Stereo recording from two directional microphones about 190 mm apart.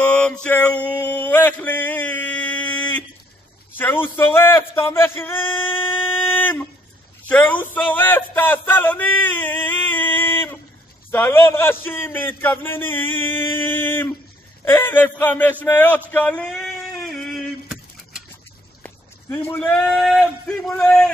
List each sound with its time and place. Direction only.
0.0 s mantra: 5° left (ahead or behind)
3.7 s a man's voice: 10° left (ahead or behind)
5.5 s music: 25° left (ahead or behind)
6.2 s a sound: 10° left (ahead or behind)
11.1 s a man's voice: 10° left (ahead or behind)
15.6 s a sound: 10° left (ahead or behind)
18.8 s a man's voice: 10° left (ahead or behind)